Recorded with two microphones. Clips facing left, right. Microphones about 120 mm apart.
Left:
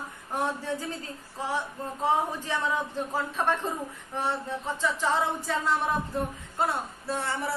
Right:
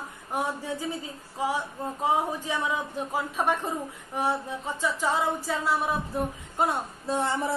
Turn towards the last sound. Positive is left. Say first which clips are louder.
# right 4 dB
turn(degrees=-20)  # may be behind; listen again after turning